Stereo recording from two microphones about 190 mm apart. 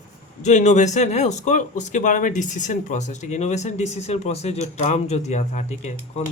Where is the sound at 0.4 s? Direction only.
35° left (ahead or behind).